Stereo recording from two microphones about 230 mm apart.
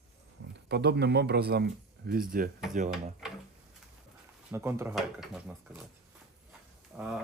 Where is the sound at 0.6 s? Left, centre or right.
Right.